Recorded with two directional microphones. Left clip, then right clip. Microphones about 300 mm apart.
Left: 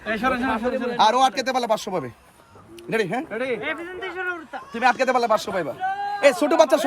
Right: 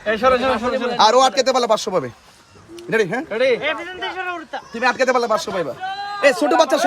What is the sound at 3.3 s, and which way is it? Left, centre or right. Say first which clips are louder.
Speech: right 8 dB; right.